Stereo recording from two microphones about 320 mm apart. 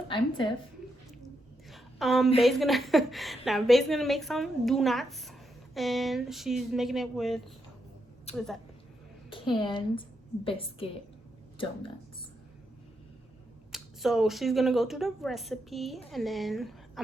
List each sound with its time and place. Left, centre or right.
1.7 s a sound: centre
2.4 s a woman's voice: centre
8.3 s a woman's voice: centre
13.7 s a woman's voice: centre